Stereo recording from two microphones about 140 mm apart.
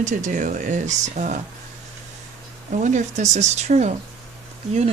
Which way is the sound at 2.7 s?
60° right (ahead or behind).